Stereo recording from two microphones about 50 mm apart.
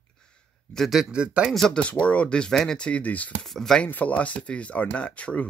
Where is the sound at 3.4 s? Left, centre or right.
Centre.